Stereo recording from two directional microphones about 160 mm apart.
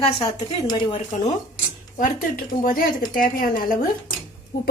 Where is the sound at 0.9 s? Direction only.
45° left (ahead or behind).